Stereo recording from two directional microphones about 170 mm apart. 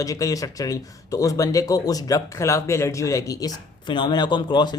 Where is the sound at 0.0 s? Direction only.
20° left (ahead or behind).